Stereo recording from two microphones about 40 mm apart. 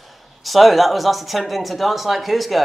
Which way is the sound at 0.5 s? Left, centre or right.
Centre.